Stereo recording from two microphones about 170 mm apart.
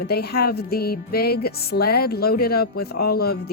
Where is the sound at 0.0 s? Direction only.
70° left (ahead or behind).